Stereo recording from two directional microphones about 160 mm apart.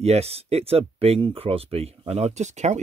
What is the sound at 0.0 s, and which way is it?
Speech, 40° right (ahead or behind).